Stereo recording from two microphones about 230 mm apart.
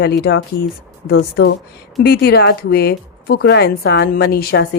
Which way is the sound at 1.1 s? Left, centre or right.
Left.